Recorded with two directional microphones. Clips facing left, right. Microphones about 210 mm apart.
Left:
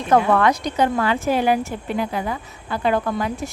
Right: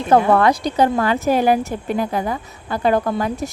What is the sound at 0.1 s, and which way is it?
A woman's voice, 35° right (ahead or behind).